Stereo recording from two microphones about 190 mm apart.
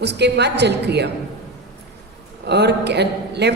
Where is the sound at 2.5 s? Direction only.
60° right (ahead or behind).